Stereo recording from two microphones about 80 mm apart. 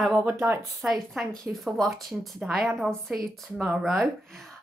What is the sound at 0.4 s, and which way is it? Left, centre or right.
Speech, right.